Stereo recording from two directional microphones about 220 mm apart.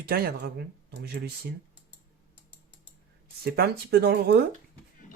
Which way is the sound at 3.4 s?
45° right (ahead or behind).